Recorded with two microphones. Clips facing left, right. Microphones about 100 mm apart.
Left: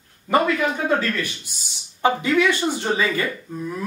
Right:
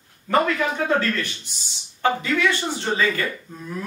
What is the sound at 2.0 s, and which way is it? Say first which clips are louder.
Speech: left 3 dB; 15° left (ahead or behind).